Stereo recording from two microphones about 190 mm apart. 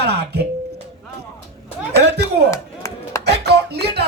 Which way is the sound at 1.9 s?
60° right (ahead or behind).